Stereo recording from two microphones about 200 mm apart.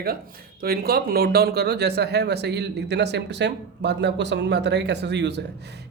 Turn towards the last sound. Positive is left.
turn(degrees=-60)  # may be behind; listen again after turning